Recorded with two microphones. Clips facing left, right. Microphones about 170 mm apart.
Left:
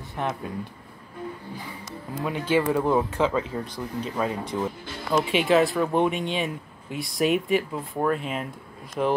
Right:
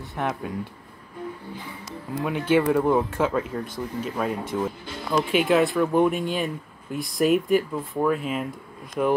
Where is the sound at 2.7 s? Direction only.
Centre (ahead or behind).